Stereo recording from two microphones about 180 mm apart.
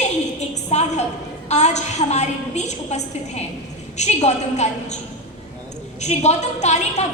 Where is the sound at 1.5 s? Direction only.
40° left (ahead or behind).